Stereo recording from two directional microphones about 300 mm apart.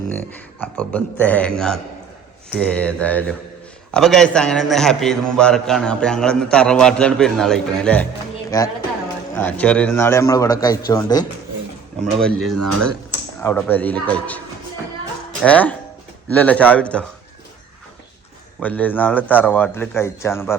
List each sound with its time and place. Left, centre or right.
0.1 s a man's voice: centre
11.9 s a man's voice: centre
12.5 s speech: right
13.4 s a man's voice: centre
18.6 s a man's voice: centre